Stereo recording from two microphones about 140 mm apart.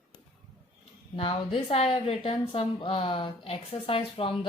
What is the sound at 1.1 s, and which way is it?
A woman's voice, 40° left (ahead or behind).